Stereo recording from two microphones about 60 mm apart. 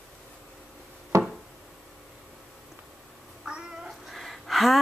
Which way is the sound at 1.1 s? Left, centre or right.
Right.